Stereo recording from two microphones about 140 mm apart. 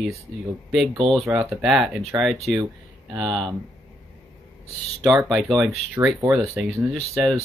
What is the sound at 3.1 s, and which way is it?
Speech, 35° right (ahead or behind).